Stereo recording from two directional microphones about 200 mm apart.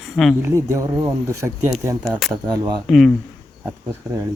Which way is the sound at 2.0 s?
Centre (ahead or behind).